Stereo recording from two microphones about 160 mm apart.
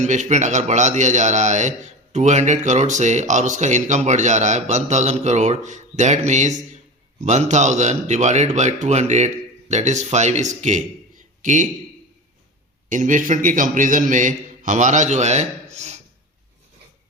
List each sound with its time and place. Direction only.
0.0 s speech: 50° right (ahead or behind)
12.9 s speech: 55° right (ahead or behind)